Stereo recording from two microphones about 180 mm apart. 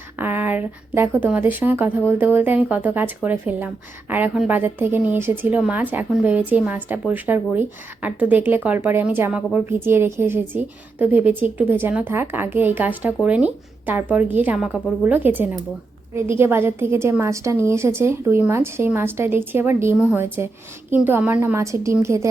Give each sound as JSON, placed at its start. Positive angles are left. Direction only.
{"t": 0.2, "sound": "a woman's voice", "side_deg": -10}